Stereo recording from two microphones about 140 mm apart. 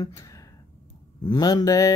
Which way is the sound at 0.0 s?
25° left (ahead or behind).